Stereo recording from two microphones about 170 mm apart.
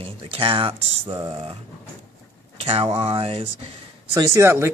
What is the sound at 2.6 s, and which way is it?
Speech, 35° right (ahead or behind).